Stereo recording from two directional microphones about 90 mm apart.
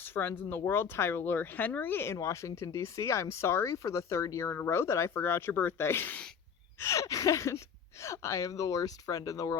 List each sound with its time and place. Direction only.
0.0 s speech: 25° left (ahead or behind)
6.7 s speech: 35° left (ahead or behind)